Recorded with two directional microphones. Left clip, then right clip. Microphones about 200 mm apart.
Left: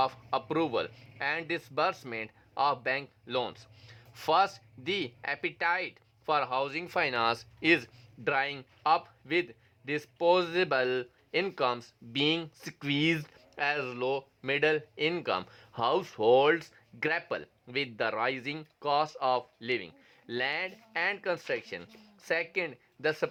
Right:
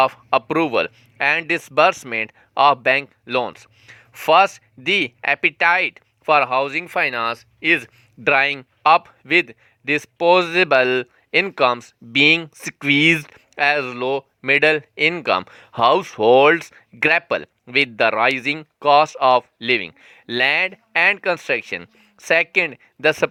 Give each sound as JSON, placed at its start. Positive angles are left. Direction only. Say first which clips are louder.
{"t": 0.0, "sound": "speech", "louder": "right 13 dB", "side_deg": -30}
{"t": 7.8, "sound": "speech", "louder": "right 9 dB", "side_deg": -40}